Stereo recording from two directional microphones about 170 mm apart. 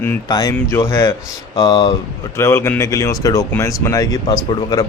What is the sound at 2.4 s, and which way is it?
Speech, 15° left (ahead or behind).